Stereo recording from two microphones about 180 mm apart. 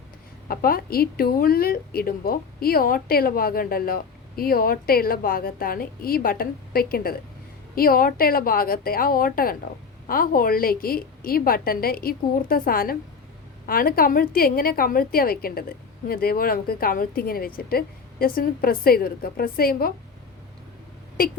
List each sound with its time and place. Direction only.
0.4 s a woman's voice: 55° left (ahead or behind)